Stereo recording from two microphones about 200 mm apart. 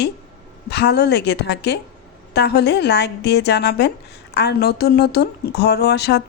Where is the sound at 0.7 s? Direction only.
55° left (ahead or behind).